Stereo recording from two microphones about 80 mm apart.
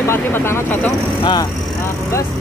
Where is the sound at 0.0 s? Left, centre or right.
Left.